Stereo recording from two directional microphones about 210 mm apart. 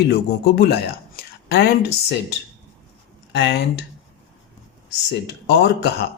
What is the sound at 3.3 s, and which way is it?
Speech, 55° left (ahead or behind).